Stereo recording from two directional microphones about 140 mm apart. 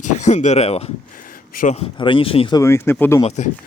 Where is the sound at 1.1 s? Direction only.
80° left.